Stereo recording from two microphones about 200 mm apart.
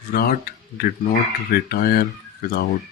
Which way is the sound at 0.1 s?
50° left (ahead or behind).